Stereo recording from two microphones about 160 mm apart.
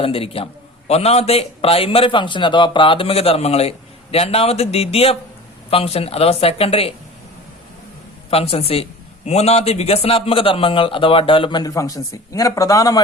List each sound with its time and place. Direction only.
0.0 s a man's voice: 35° left (ahead or behind)
8.3 s a man's voice: 35° left (ahead or behind); by 13.0 s 20° left (ahead or behind)